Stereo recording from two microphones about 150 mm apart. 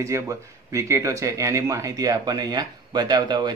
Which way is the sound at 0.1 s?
20° right (ahead or behind).